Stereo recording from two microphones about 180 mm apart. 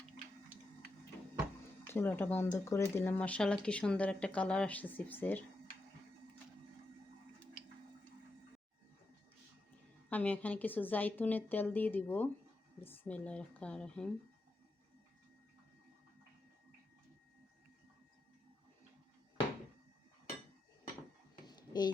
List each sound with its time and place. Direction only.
1.9 s speech: 10° left (ahead or behind)
10.1 s speech: 10° left (ahead or behind)
21.4 s dishes: 25° left (ahead or behind)